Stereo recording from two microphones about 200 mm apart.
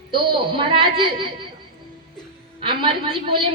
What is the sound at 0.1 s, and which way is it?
A woman's voice, 25° right (ahead or behind).